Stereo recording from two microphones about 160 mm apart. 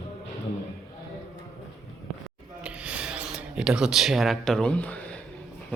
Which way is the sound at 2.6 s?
5° right (ahead or behind).